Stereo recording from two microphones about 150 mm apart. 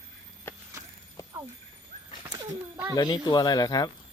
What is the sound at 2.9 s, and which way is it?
Speech, 25° left (ahead or behind).